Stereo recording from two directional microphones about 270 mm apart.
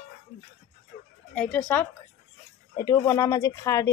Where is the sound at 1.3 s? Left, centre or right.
Centre.